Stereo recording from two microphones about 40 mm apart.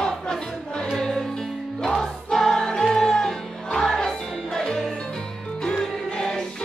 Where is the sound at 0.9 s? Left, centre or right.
Centre.